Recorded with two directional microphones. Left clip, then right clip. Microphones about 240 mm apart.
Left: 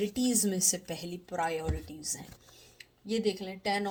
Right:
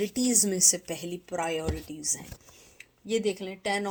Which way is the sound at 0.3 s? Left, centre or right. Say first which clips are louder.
Right 8 dB; centre.